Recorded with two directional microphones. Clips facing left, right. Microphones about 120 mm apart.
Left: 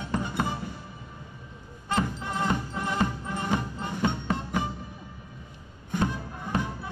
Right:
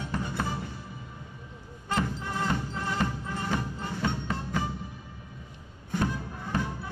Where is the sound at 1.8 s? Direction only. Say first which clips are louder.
Left 2 dB; 20° left (ahead or behind).